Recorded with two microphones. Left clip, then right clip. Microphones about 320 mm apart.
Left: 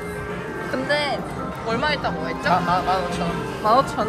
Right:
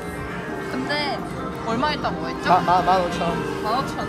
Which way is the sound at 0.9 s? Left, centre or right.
Centre.